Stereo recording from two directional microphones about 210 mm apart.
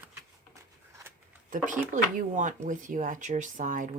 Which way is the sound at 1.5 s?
40° right (ahead or behind).